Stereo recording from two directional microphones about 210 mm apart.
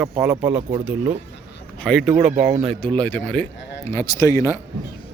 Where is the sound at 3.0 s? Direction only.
5° left (ahead or behind).